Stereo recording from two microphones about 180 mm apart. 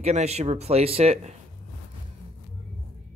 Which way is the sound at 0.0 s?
35° right (ahead or behind).